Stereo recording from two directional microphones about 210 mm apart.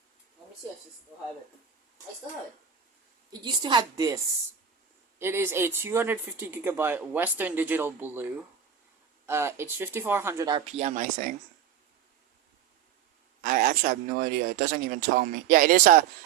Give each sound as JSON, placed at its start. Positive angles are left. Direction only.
{"t": 3.4, "sound": "a woman's voice", "side_deg": -20}
{"t": 5.2, "sound": "speech", "side_deg": -10}
{"t": 10.7, "sound": "speech", "side_deg": -35}
{"t": 13.4, "sound": "speech", "side_deg": -40}